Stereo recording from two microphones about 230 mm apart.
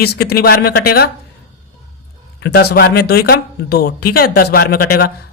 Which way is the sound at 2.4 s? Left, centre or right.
Left.